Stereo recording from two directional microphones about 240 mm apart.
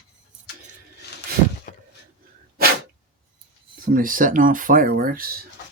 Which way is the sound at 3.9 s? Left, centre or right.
Right.